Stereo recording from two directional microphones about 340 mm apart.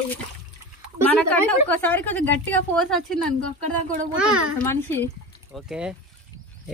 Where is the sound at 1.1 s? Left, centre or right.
Centre.